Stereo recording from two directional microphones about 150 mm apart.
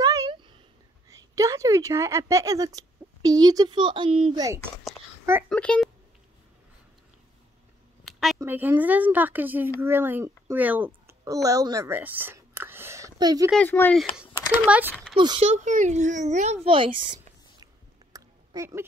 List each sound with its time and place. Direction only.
0.0 s a sound: 20° right (ahead or behind)
1.3 s speech: 20° right (ahead or behind)
5.5 s speech: 5° left (ahead or behind)
8.0 s a sound: centre (ahead or behind)
8.4 s speech: 15° right (ahead or behind)
13.6 s speech: 10° left (ahead or behind)
15.1 s a child's voice: 35° right (ahead or behind)
15.4 s a child's voice: 55° right (ahead or behind)
16.6 s a child's voice: 35° right (ahead or behind)
18.1 s a sound: 20° right (ahead or behind)